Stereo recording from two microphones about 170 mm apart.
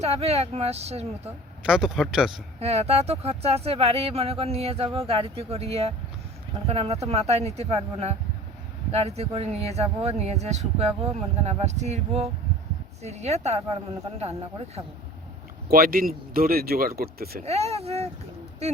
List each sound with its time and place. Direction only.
0.0 s speech: 40° right (ahead or behind)
1.6 s speech: 5° right (ahead or behind)
2.6 s speech: 40° right (ahead or behind)
15.7 s speech: 60° right (ahead or behind)
17.4 s speech: 40° right (ahead or behind)